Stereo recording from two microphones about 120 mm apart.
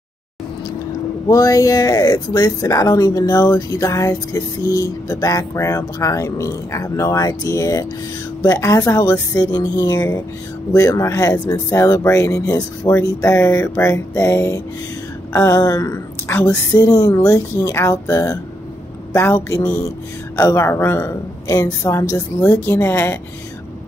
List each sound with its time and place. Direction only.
1.3 s speech: 30° left (ahead or behind)